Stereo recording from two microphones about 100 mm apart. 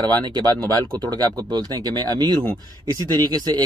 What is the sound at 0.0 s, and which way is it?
Speech, 45° right (ahead or behind).